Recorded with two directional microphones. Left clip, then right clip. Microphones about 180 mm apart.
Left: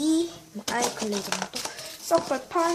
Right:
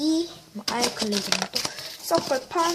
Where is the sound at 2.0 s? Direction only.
15° right (ahead or behind).